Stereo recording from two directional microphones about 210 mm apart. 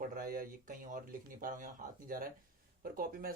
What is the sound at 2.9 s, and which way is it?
Speech, 45° right (ahead or behind).